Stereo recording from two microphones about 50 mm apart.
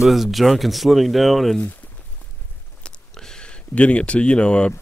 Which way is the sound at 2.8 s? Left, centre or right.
Left.